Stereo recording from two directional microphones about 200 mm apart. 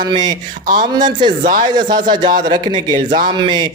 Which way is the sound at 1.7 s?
20° right (ahead or behind).